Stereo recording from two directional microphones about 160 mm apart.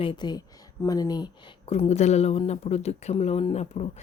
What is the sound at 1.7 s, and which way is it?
Speech, 40° left (ahead or behind).